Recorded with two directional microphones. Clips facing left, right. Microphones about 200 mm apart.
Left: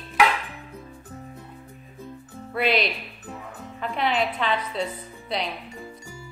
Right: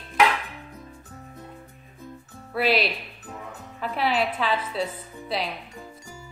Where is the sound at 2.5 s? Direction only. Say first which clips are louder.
Even; 5° right (ahead or behind).